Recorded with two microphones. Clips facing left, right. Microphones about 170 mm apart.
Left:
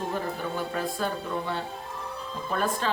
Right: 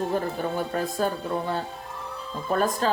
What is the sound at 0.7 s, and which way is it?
Speech, 40° right (ahead or behind).